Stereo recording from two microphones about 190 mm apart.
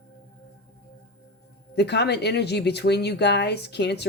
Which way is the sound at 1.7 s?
60° left (ahead or behind).